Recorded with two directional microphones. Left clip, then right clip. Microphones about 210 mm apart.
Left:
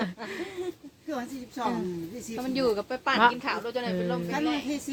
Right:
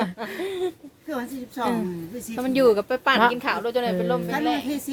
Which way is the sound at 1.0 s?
35° right (ahead or behind).